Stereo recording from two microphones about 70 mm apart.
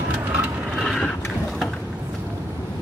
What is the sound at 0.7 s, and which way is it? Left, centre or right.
Vehicle, centre.